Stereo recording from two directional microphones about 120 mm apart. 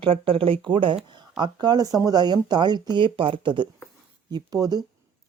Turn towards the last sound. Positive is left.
turn(degrees=-35)  # may be behind; listen again after turning